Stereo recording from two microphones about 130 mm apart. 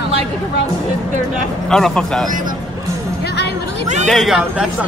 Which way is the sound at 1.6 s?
5° left (ahead or behind).